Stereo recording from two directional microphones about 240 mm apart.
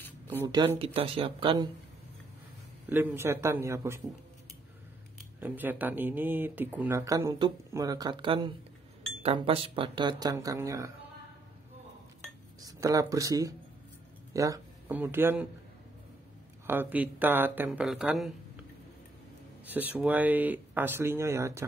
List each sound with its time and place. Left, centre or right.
0.5 s speech: centre
2.9 s speech: centre
5.4 s speech: centre
12.6 s speech: centre
16.6 s speech: centre
19.7 s speech: centre